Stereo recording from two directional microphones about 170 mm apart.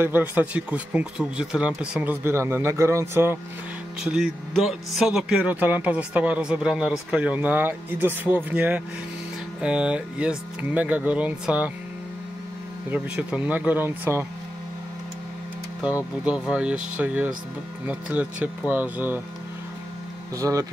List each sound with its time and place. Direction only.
0.0 s speech: 10° right (ahead or behind)
4.0 s speech: 5° right (ahead or behind)
12.9 s speech: 10° right (ahead or behind)
16.3 s speech: 5° right (ahead or behind)
20.3 s speech: 20° right (ahead or behind)